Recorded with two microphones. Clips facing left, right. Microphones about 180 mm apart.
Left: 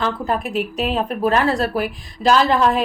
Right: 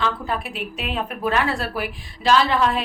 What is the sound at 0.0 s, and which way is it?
Speech, 45° left (ahead or behind).